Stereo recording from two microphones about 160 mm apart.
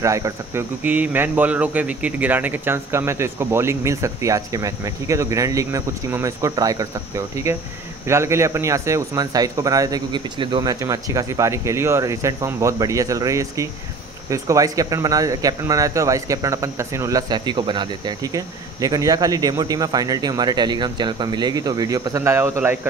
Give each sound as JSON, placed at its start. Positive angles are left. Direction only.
{"t": 0.0, "sound": "speech", "side_deg": -20}